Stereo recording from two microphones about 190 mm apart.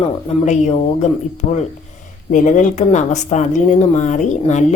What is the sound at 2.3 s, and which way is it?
A woman's voice, 40° left (ahead or behind).